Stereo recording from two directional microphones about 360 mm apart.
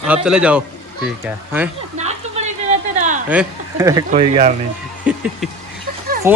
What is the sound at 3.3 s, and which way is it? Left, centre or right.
Speech, centre.